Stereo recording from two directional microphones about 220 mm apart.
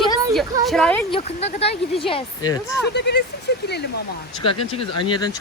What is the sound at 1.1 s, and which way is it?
Speech, 30° left (ahead or behind).